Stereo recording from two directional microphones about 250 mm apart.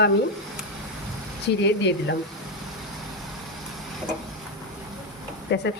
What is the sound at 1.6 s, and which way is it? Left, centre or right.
Speech, left.